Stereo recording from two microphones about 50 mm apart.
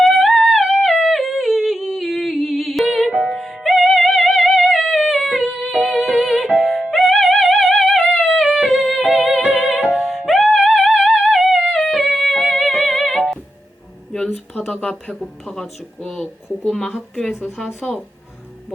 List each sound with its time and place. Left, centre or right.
0.0 s yodeling: centre
3.2 s music: centre
9.1 s music: centre
14.7 s speech: centre
16.6 s speech: centre